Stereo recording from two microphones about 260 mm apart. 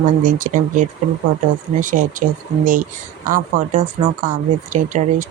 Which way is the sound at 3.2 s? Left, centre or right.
Right.